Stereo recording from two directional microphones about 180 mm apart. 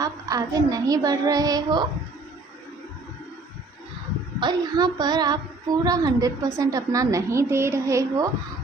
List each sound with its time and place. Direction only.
0.0 s speech: 20° right (ahead or behind)
4.4 s speech: 25° right (ahead or behind)